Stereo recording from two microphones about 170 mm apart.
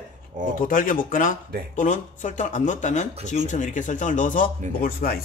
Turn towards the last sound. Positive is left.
turn(degrees=60)  # may be behind; listen again after turning